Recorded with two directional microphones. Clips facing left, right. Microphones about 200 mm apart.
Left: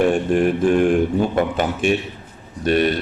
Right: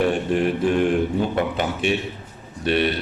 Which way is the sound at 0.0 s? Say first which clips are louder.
Left 4 dB; 50° left (ahead or behind).